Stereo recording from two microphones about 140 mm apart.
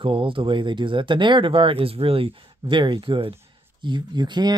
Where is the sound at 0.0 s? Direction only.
40° right (ahead or behind).